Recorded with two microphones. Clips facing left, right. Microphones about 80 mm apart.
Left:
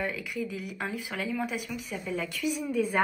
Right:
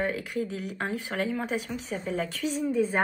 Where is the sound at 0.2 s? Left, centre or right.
Right.